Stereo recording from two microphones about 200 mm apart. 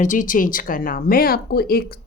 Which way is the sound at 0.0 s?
40° left (ahead or behind).